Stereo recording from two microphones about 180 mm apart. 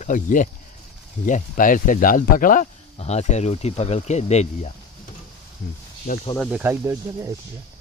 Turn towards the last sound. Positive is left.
turn(degrees=-15)  # may be behind; listen again after turning